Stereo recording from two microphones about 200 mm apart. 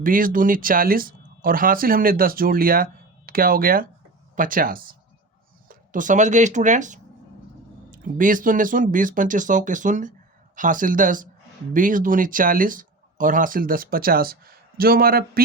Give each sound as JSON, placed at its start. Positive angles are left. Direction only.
{"t": 0.0, "sound": "speech", "side_deg": -45}